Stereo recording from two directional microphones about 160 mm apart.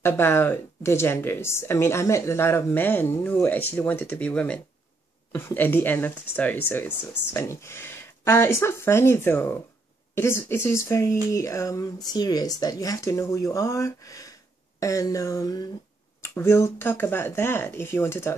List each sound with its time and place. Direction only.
0.0 s speech: 15° left (ahead or behind)